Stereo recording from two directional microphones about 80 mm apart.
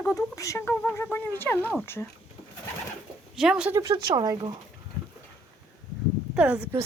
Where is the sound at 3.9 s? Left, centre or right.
Right.